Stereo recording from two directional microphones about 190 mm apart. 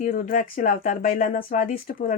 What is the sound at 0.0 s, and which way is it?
Speech, 45° left (ahead or behind).